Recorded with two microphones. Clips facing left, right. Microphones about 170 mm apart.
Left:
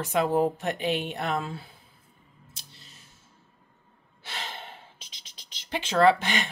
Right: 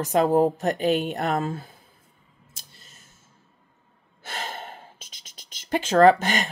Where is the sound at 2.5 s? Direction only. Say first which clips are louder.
Even; 50° right (ahead or behind).